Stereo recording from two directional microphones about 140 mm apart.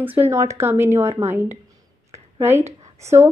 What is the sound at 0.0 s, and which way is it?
A woman's voice, 15° right (ahead or behind).